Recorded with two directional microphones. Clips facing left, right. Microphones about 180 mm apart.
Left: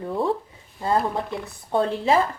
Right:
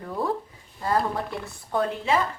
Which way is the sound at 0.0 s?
25° left (ahead or behind).